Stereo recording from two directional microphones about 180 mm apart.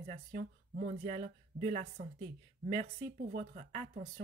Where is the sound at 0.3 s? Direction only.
55° right (ahead or behind).